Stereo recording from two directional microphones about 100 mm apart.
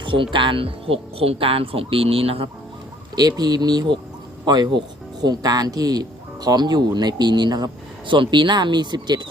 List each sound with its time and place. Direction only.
0.0 s speech: 55° right (ahead or behind); by 2.5 s 70° right (ahead or behind)
3.2 s speech: 40° right (ahead or behind)